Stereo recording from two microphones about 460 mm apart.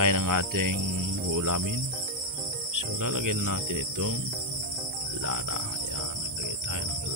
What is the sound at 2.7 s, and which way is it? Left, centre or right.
Speech, right.